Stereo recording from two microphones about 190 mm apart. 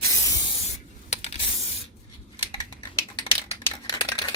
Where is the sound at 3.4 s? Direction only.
30° left (ahead or behind).